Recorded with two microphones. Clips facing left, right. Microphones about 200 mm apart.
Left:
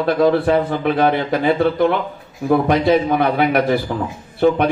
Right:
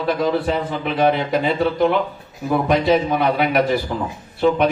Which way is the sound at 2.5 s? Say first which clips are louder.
Left 2 dB; 55° left (ahead or behind).